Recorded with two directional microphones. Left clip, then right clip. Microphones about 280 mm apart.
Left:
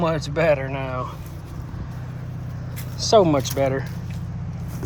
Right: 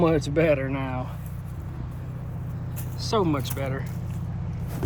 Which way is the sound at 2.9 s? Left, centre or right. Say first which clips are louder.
Left 9 dB; centre.